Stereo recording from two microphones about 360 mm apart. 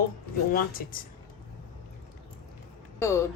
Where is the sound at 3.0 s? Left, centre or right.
Centre.